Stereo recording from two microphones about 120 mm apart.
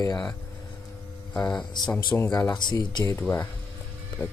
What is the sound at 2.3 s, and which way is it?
Speech, 35° left (ahead or behind).